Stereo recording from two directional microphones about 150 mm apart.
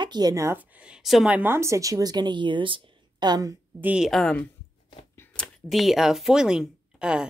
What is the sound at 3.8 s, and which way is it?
Speech, 5° right (ahead or behind).